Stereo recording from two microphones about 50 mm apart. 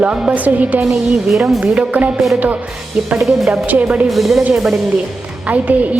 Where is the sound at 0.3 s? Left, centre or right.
Right.